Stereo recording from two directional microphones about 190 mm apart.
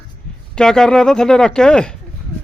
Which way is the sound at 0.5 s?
5° left (ahead or behind).